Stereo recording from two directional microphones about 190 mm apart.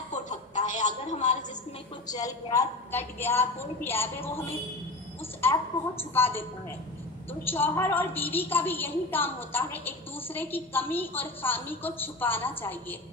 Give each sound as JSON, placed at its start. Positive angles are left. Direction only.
{"t": 0.1, "sound": "a sound", "side_deg": 40}
{"t": 2.0, "sound": "a woman's voice", "side_deg": 20}
{"t": 7.4, "sound": "a woman's voice", "side_deg": 10}